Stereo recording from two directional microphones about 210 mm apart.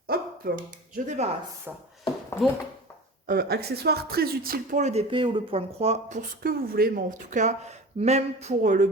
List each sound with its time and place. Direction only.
0.1 s speech: 45° right (ahead or behind)
1.7 s speech: 5° right (ahead or behind)
3.2 s speech: 50° right (ahead or behind)